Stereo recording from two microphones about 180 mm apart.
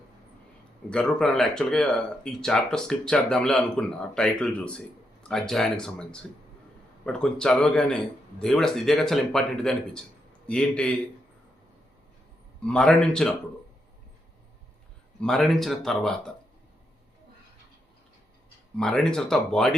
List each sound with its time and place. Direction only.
0.9 s a man's voice: 5° left (ahead or behind)
12.6 s a man's voice: 5° left (ahead or behind)
15.2 s a man's voice: centre (ahead or behind)
18.8 s a man's voice: 5° left (ahead or behind)